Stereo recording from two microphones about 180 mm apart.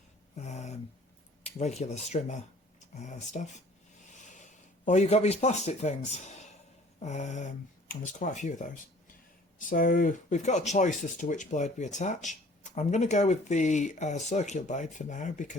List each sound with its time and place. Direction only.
0.3 s a sound: 40° left (ahead or behind)
1.5 s speech: 35° left (ahead or behind)
4.9 s speech: 40° left (ahead or behind)